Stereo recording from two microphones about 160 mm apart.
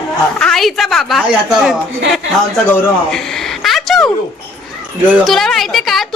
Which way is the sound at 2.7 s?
Centre (ahead or behind).